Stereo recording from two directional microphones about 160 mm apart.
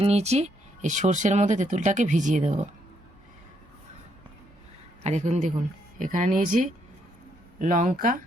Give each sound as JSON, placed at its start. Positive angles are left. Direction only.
{"t": 0.0, "sound": "speech", "side_deg": -40}
{"t": 5.0, "sound": "speech", "side_deg": -45}